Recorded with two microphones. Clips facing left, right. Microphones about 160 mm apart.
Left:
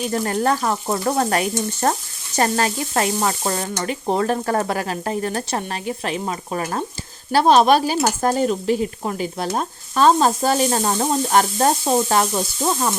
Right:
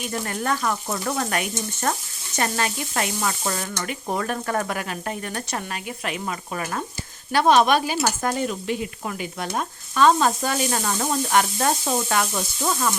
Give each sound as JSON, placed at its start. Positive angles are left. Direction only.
{"t": 0.0, "sound": "sizzle", "side_deg": 35}